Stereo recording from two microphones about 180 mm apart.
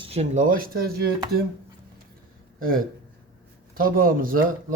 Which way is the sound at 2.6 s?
55° right (ahead or behind).